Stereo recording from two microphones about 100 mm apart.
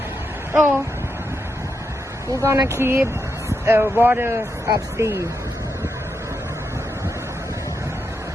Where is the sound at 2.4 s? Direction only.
30° right (ahead or behind).